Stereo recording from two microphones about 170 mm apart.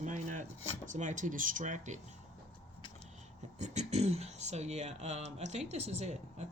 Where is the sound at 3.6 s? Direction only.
40° right (ahead or behind).